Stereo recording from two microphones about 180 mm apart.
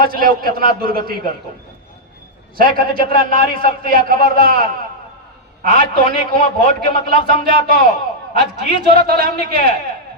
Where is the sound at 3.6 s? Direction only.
50° right (ahead or behind).